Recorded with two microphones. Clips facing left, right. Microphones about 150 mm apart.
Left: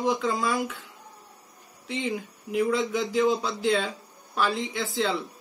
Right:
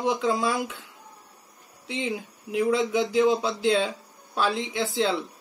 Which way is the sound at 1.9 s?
20° right (ahead or behind).